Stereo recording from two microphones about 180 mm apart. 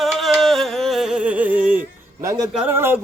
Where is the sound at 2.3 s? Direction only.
15° right (ahead or behind).